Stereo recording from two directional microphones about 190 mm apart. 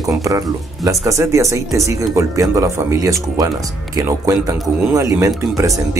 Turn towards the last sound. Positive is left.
turn(degrees=-15)  # may be behind; listen again after turning